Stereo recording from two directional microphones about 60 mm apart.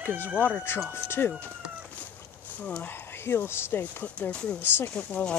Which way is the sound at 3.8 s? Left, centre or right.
Left.